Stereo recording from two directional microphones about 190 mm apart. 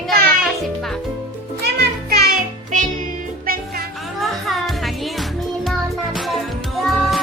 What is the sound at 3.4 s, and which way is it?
Music, 50° right (ahead or behind).